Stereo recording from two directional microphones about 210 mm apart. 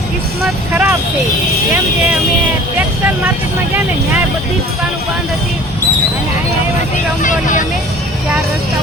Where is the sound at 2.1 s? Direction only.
5° right (ahead or behind).